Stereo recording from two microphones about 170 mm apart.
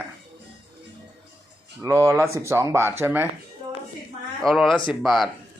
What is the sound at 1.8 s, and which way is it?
Speech, 15° right (ahead or behind).